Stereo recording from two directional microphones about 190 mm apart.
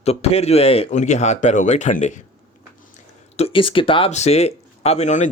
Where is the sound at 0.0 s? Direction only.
35° left (ahead or behind).